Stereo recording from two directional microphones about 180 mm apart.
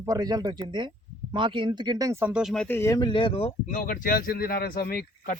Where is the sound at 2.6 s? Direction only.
15° left (ahead or behind); by 3.5 s 30° left (ahead or behind).